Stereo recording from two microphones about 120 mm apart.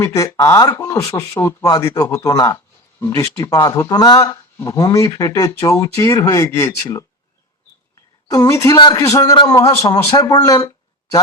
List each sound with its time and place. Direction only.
0.0 s speech: 25° left (ahead or behind)
8.3 s speech: 25° left (ahead or behind)
8.8 s a man's voice: 40° left (ahead or behind)
9.0 s speech: 25° left (ahead or behind)